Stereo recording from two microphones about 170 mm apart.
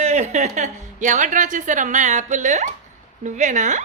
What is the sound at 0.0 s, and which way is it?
A woman's voice, 40° right (ahead or behind).